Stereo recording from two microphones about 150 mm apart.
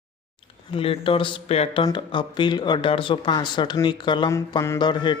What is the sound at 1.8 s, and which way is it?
Speech, 30° left (ahead or behind).